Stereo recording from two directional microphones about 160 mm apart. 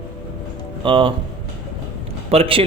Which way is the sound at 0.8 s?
30° right (ahead or behind).